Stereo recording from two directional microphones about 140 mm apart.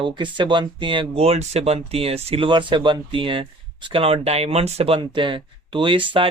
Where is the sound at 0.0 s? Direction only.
35° right (ahead or behind).